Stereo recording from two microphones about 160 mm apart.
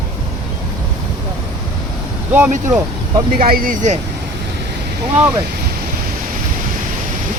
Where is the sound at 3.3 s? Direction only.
65° right (ahead or behind).